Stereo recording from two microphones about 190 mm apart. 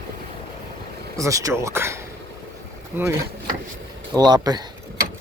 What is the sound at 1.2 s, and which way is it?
Speech, 15° right (ahead or behind).